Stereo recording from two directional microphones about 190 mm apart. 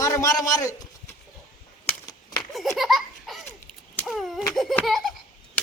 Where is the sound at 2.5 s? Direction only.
Centre (ahead or behind).